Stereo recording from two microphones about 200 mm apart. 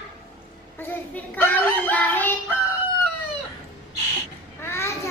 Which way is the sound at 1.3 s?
10° left (ahead or behind).